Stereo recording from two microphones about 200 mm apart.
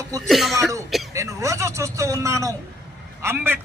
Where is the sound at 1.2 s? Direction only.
15° right (ahead or behind).